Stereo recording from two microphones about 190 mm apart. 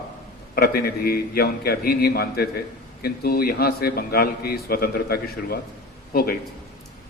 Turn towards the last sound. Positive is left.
turn(degrees=50)  # may be behind; listen again after turning